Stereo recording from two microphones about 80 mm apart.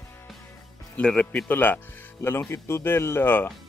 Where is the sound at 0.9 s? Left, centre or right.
Centre.